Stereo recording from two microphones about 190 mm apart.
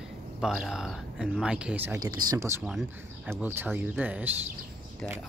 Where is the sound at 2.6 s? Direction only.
Centre (ahead or behind).